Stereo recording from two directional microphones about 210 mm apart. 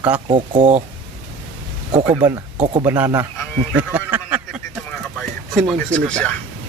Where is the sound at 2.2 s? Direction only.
20° right (ahead or behind).